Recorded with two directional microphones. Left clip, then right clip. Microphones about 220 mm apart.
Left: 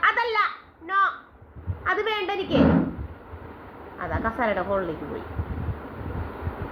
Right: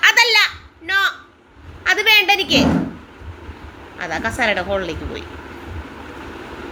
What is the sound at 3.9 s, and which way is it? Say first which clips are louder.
Speech: right 6 dB; 15° right (ahead or behind).